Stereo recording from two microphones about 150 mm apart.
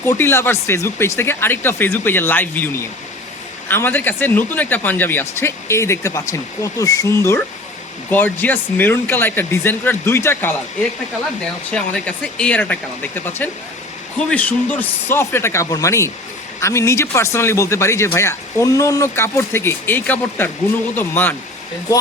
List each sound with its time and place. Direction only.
0.0 s speech: 15° left (ahead or behind)
11.7 s speech: 5° left (ahead or behind)